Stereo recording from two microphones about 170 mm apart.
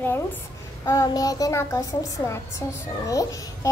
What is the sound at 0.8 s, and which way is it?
A child's voice, 20° left (ahead or behind).